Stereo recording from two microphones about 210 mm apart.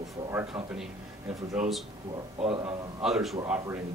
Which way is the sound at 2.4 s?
25° right (ahead or behind).